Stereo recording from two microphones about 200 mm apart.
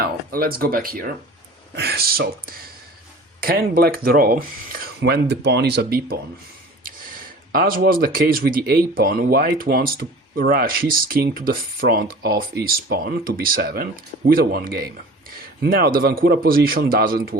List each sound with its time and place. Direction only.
0.0 s speech: 50° right (ahead or behind)
7.5 s speech: 45° right (ahead or behind)